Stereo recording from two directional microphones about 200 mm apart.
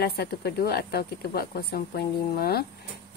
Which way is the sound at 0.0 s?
50° left (ahead or behind).